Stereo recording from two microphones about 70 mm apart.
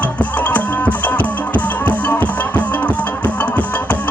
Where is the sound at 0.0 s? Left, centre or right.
Left.